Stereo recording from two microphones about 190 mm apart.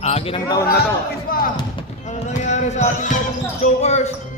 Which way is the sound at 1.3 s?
50° left (ahead or behind).